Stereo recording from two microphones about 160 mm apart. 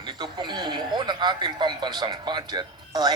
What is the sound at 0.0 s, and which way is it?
Speech, 30° right (ahead or behind).